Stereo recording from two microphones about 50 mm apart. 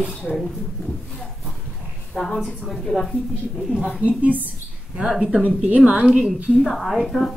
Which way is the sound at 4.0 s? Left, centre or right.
Right.